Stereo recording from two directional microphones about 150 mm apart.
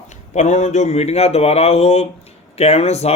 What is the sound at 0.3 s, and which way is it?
Speech, 50° left (ahead or behind).